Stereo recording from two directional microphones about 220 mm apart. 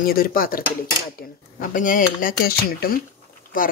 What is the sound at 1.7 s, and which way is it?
Speech, 35° left (ahead or behind).